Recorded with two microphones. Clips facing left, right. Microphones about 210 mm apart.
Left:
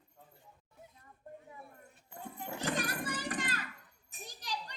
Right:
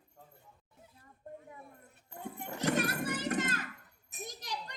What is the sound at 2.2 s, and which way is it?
Children playing, 15° right (ahead or behind).